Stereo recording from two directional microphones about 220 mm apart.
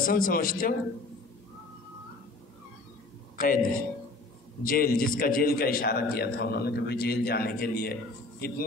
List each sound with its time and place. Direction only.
0.0 s a man's voice: 40° left (ahead or behind)
3.3 s a man's voice: 40° left (ahead or behind)
4.6 s a man's voice: 40° left (ahead or behind)